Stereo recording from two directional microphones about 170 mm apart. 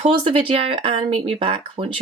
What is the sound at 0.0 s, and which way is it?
Speech, 35° right (ahead or behind).